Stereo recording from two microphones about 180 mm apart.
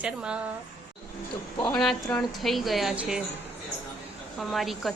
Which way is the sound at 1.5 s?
20° left (ahead or behind).